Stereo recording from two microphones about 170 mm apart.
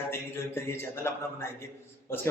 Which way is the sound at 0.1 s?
15° left (ahead or behind).